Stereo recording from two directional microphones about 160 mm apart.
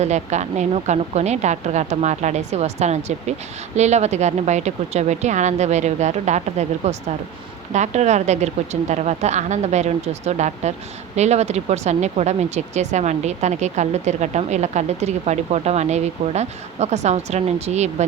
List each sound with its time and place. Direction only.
0.0 s a woman's voice: 45° right (ahead or behind)